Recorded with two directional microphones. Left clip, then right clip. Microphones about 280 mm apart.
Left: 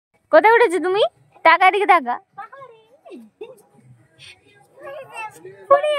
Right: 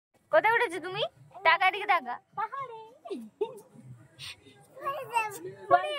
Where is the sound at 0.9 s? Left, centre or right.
Centre.